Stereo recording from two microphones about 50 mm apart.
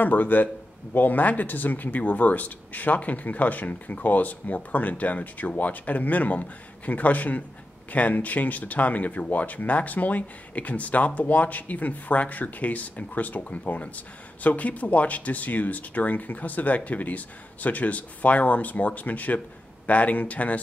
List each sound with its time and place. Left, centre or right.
0.0 s speech: left